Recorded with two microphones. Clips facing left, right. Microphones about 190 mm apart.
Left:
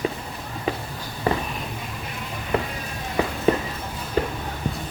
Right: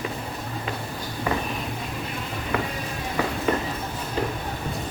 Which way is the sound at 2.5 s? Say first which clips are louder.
Left 3 dB; 30° left (ahead or behind).